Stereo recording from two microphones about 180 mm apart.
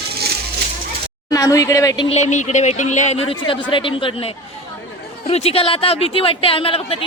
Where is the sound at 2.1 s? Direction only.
40° left (ahead or behind).